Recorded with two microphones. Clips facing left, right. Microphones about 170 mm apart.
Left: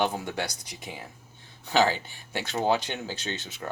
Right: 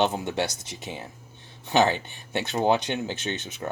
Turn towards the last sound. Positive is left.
turn(degrees=-20)  # may be behind; listen again after turning